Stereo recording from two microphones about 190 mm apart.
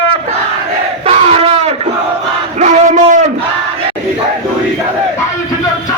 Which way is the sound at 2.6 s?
40° right (ahead or behind).